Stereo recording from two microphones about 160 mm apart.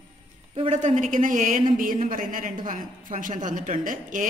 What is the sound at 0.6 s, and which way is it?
A woman's voice, 45° right (ahead or behind).